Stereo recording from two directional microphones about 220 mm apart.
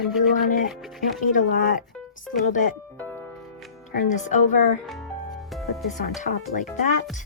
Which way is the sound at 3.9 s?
35° left (ahead or behind).